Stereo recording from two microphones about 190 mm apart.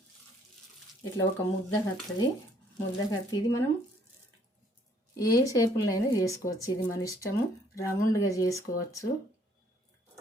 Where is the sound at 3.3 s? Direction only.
20° left (ahead or behind).